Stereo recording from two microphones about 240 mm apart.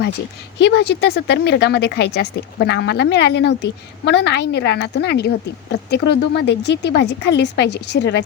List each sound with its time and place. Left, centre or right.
0.6 s speech: left